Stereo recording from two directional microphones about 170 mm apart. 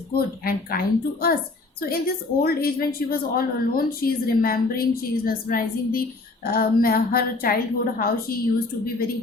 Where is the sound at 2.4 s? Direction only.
65° left (ahead or behind).